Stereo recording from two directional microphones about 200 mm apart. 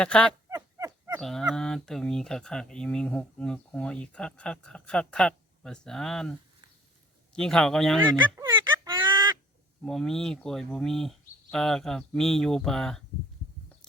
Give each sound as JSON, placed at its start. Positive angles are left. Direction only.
{"t": 0.0, "sound": "speech", "side_deg": 5}
{"t": 0.5, "sound": "a sound", "side_deg": -15}
{"t": 1.2, "sound": "speech", "side_deg": 0}
{"t": 7.3, "sound": "speech", "side_deg": 5}
{"t": 8.2, "sound": "a sound", "side_deg": -15}
{"t": 9.8, "sound": "speech", "side_deg": 0}